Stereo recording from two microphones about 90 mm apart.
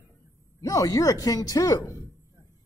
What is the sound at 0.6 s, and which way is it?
Speech, 40° left (ahead or behind).